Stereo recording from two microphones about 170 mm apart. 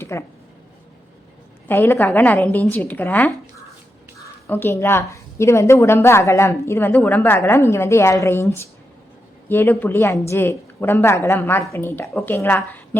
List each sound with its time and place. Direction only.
0.0 s speech: 15° left (ahead or behind)
1.6 s a woman's voice: 15° left (ahead or behind)
4.4 s a woman's voice: 15° left (ahead or behind)